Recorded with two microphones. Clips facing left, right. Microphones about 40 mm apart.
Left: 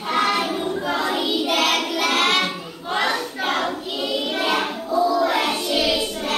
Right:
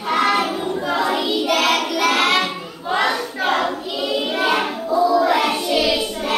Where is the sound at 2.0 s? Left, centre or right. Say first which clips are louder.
Right 2 dB; centre.